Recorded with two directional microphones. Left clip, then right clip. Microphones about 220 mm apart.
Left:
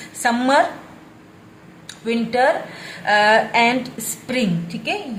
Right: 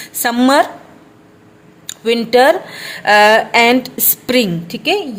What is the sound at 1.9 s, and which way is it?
A woman's voice, 50° right (ahead or behind).